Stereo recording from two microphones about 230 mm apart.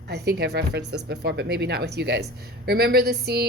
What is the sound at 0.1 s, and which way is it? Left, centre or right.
Speech, right.